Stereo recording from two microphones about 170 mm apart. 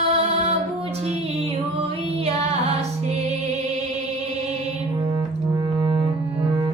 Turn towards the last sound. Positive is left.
turn(degrees=-30)  # may be behind; listen again after turning